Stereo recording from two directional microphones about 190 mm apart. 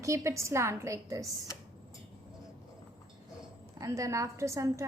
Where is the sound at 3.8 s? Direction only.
15° right (ahead or behind).